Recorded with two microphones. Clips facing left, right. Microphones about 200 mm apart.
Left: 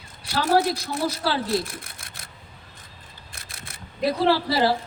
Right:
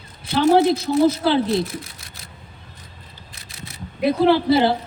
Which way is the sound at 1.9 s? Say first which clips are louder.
Right 1 dB; 50° left (ahead or behind).